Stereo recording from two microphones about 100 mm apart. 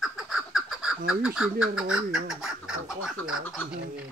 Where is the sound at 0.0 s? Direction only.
5° right (ahead or behind).